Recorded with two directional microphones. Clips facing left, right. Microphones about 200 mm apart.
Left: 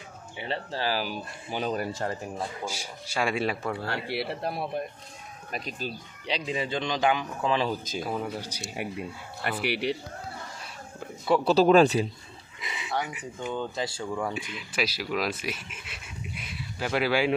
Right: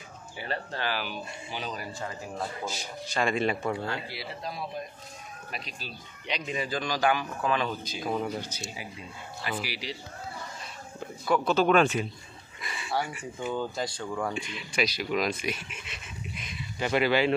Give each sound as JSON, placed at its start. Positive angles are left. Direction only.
{"t": 0.4, "sound": "speech", "side_deg": 30}
{"t": 2.6, "sound": "speech", "side_deg": 10}
{"t": 3.9, "sound": "speech", "side_deg": 65}
{"t": 5.5, "sound": "speech", "side_deg": 45}
{"t": 6.3, "sound": "a man's voice", "side_deg": 25}
{"t": 8.0, "sound": "speech", "side_deg": 5}
{"t": 8.7, "sound": "speech", "side_deg": 60}
{"t": 11.2, "sound": "speech", "side_deg": 30}
{"t": 12.5, "sound": "a sound", "side_deg": 20}
{"t": 13.0, "sound": "speech", "side_deg": 15}
{"t": 13.4, "sound": "speech", "side_deg": -5}